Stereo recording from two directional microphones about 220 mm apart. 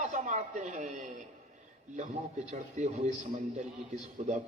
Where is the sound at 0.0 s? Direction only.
35° right (ahead or behind).